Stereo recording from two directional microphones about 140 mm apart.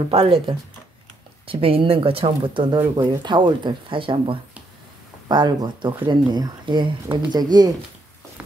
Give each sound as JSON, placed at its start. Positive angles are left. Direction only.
{"t": 0.1, "sound": "speech", "side_deg": -40}